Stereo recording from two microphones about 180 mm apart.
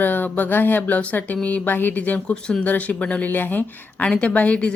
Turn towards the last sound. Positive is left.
turn(degrees=5)  # may be behind; listen again after turning